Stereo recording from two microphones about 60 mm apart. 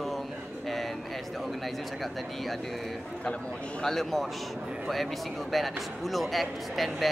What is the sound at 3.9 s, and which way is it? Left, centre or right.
A man's voice, centre.